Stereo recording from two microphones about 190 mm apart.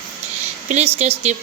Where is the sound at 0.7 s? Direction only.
35° right (ahead or behind).